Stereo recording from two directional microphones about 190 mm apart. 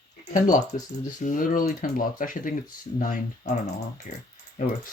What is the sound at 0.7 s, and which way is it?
Speech, 45° left (ahead or behind).